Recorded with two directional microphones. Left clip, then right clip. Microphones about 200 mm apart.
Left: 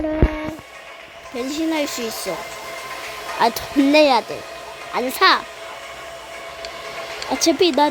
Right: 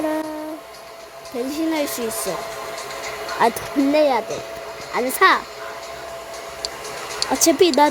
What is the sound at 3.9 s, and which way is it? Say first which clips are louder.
Speech: left 3 dB; 25° left (ahead or behind).